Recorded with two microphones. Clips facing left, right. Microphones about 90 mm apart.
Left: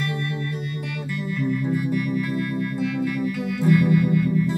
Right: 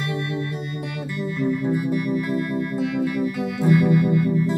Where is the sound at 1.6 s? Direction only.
10° right (ahead or behind).